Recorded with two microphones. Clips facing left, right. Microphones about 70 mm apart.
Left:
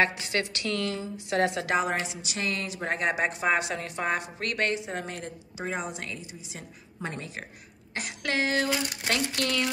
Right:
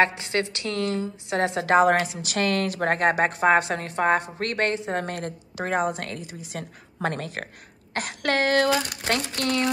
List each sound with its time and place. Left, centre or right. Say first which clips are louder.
0.0 s a woman's voice: right 4 dB; right
5.0 s a woman's voice: right 6 dB; right
7.9 s speech: right 5 dB; right